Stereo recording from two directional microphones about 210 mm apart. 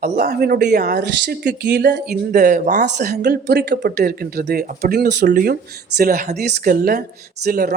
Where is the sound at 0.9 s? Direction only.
55° right (ahead or behind).